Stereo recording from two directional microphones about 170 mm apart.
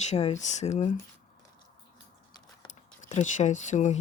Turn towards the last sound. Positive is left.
turn(degrees=45)  # may be behind; listen again after turning